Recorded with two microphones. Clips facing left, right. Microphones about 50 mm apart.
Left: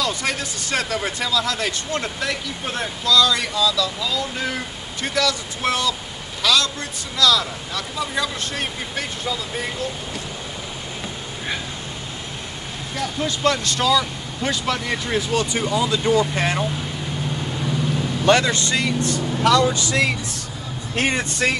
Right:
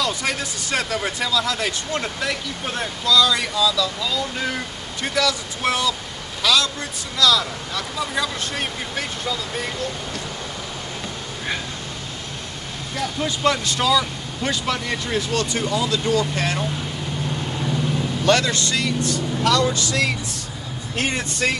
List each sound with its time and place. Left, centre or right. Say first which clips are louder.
0.0 s speech: even; centre
12.9 s speech: even; centre; by 16.6 s left
18.2 s speech: left 2 dB; left
19.4 s speech: left 3 dB; centre